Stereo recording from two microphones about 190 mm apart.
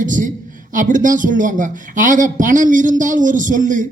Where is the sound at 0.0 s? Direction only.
45° right (ahead or behind).